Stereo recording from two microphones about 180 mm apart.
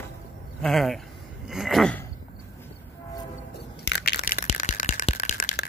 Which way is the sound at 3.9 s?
60° left (ahead or behind).